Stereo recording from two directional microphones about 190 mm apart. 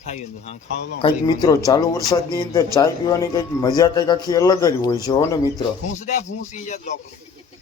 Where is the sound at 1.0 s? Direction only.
20° left (ahead or behind).